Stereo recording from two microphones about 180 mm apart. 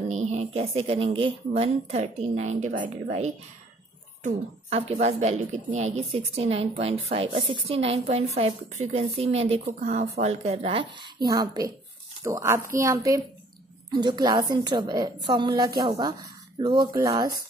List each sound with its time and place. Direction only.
0.1 s a woman's voice: 40° right (ahead or behind); by 17.3 s 20° right (ahead or behind)